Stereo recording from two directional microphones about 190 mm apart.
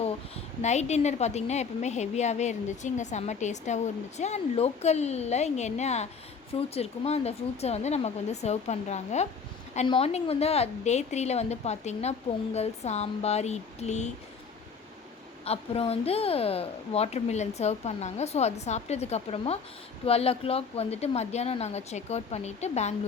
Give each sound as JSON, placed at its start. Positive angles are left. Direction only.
{"t": 0.6, "sound": "a woman's voice", "side_deg": 35}
{"t": 15.4, "sound": "a woman's voice", "side_deg": 30}